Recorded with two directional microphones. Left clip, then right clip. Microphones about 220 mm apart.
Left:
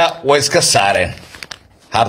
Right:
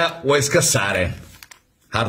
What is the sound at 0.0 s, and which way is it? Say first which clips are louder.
A man's voice: left 6 dB; 20° right (ahead or behind).